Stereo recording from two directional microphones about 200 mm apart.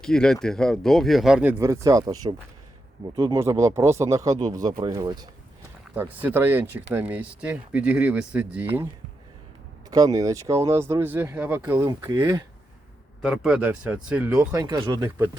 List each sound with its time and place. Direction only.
0.0 s speech: 5° left (ahead or behind); by 2.1 s 15° right (ahead or behind)
3.2 s speech: 15° right (ahead or behind)
9.9 s speech: 20° right (ahead or behind)
13.2 s speech: 5° right (ahead or behind); by 15.1 s 20° right (ahead or behind)